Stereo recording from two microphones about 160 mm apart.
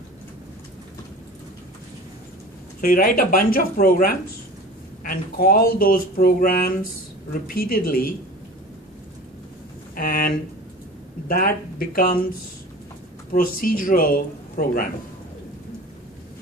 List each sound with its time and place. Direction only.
2.8 s speech: 65° left (ahead or behind)
9.9 s speech: 65° left (ahead or behind)
13.3 s speech: 60° left (ahead or behind)